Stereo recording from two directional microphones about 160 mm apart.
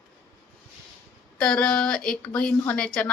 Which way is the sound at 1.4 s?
5° left (ahead or behind).